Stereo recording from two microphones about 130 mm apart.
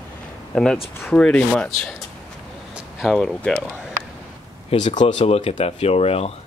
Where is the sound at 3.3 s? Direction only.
10° left (ahead or behind).